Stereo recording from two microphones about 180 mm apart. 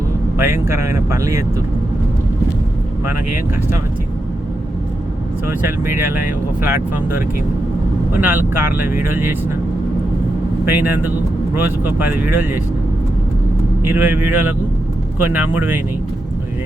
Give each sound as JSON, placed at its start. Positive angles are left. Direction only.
{"t": 0.3, "sound": "speech", "side_deg": -15}
{"t": 3.1, "sound": "speech", "side_deg": -10}
{"t": 5.5, "sound": "speech", "side_deg": -10}
{"t": 8.1, "sound": "speech", "side_deg": -10}
{"t": 10.7, "sound": "speech", "side_deg": -10}
{"t": 13.8, "sound": "speech", "side_deg": -10}